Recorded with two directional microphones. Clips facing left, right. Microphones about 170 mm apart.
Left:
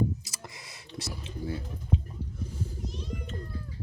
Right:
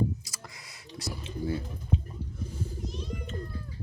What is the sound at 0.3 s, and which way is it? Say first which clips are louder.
Whispering: left 2 dB; 25° left (ahead or behind).